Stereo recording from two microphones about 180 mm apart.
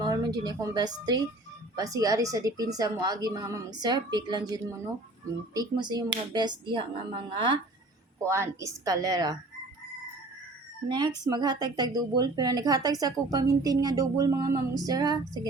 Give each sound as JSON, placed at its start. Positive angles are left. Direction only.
{"t": 0.0, "sound": "speech", "side_deg": -20}
{"t": 8.2, "sound": "speech", "side_deg": -15}
{"t": 10.8, "sound": "speech", "side_deg": -25}